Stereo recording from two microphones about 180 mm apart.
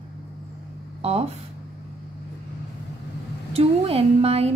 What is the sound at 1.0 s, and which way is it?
Speech, 35° right (ahead or behind).